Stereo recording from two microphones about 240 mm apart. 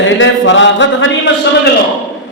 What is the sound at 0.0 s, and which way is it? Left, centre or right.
A man's voice, left.